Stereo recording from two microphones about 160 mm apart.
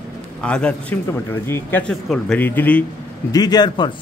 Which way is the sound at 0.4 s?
5° left (ahead or behind).